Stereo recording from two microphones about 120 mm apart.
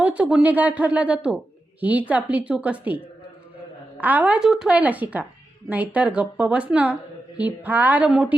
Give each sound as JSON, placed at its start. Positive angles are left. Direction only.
{"t": 0.0, "sound": "speech", "side_deg": -10}
{"t": 4.0, "sound": "speech", "side_deg": -15}